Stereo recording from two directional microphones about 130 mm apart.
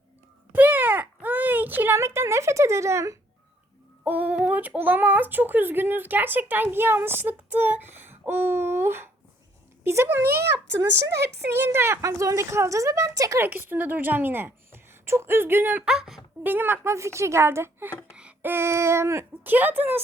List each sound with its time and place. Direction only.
0.5 s a sound: 15° right (ahead or behind)
4.0 s speech: 10° right (ahead or behind)
16.4 s speech: 15° right (ahead or behind)